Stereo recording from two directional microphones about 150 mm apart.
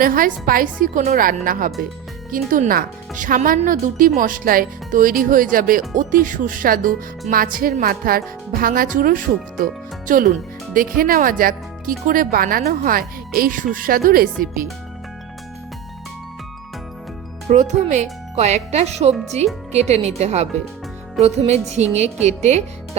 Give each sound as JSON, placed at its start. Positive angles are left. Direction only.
{"t": 0.0, "sound": "speech", "side_deg": -65}
{"t": 17.5, "sound": "speech", "side_deg": -50}